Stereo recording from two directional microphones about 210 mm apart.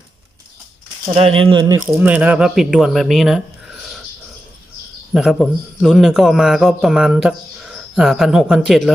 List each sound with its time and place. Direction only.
1.0 s speech: 25° right (ahead or behind)
2.0 s speech: 5° right (ahead or behind)
5.1 s a man's voice: centre (ahead or behind)